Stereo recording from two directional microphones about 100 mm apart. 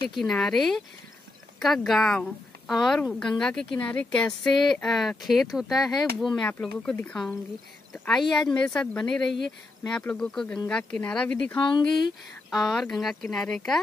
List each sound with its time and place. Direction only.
0.1 s speech: 5° left (ahead or behind)
8.1 s speech: 5° left (ahead or behind)
11.7 s speech: 50° left (ahead or behind)
12.4 s speech: centre (ahead or behind)